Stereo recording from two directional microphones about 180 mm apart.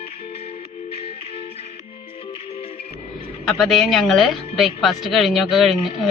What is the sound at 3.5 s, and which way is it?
Speech, centre (ahead or behind).